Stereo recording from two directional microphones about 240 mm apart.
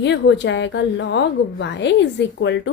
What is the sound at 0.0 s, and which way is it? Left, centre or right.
A woman's voice, left.